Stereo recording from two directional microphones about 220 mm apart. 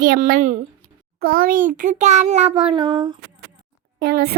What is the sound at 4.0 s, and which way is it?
Speech, 45° right (ahead or behind).